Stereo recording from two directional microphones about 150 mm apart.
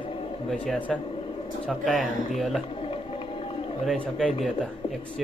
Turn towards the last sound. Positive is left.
turn(degrees=5)  # may be behind; listen again after turning